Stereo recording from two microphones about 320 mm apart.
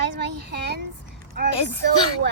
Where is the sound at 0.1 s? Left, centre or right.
Right.